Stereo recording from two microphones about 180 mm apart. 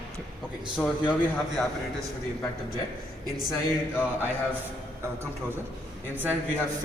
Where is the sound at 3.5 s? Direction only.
10° left (ahead or behind).